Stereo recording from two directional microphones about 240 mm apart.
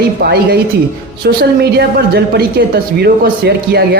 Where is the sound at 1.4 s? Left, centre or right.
Right.